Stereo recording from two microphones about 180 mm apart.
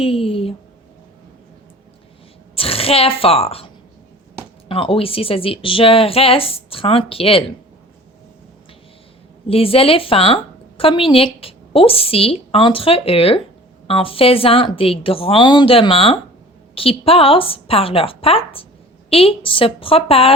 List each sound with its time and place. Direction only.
0.0 s a sound: 30° left (ahead or behind)
2.6 s a woman's voice: 30° left (ahead or behind)
4.7 s a woman's voice: 30° left (ahead or behind)
9.5 s a woman's voice: 30° left (ahead or behind)